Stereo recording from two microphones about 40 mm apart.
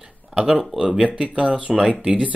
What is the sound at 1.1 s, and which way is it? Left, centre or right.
Speech, right.